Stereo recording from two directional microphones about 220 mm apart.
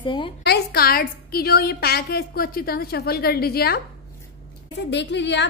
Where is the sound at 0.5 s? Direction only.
45° left (ahead or behind).